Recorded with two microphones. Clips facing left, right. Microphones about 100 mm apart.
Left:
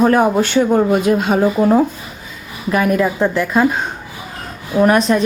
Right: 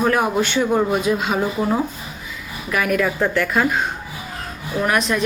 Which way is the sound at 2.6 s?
30° left (ahead or behind).